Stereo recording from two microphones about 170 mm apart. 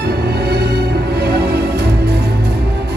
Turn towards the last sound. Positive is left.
turn(degrees=-75)  # may be behind; listen again after turning